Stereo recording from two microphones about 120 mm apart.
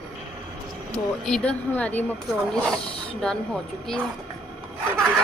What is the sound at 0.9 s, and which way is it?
Speech, 10° left (ahead or behind).